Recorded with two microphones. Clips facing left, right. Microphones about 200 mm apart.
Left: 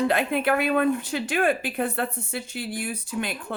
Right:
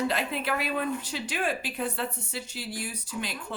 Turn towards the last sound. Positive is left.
turn(degrees=55)  # may be behind; listen again after turning